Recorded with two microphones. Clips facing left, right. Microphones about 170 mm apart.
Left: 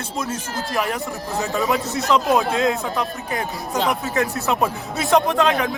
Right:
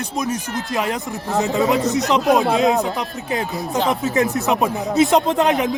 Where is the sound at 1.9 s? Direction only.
20° right (ahead or behind).